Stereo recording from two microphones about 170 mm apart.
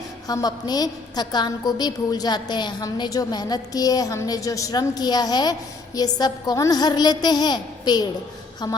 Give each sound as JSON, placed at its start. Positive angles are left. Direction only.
{"t": 0.3, "sound": "a woman's voice", "side_deg": 20}